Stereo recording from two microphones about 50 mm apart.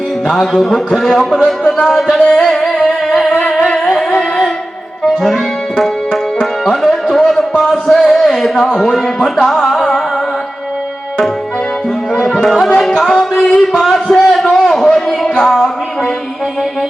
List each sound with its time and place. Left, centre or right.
0.3 s a man's voice: centre
2.3 s music: centre
5.0 s music: centre
6.7 s a sound: centre
12.1 s music: centre
12.5 s a sound: centre